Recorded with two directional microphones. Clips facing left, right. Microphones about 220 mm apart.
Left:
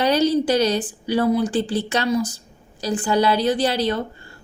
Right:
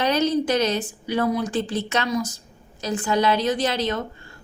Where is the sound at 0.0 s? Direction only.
35° left (ahead or behind).